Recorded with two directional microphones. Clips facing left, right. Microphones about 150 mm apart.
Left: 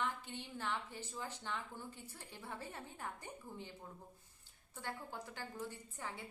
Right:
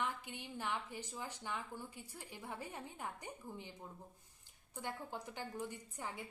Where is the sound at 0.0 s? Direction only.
15° right (ahead or behind).